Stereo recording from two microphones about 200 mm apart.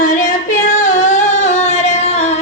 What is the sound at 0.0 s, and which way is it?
Singing, 40° left (ahead or behind).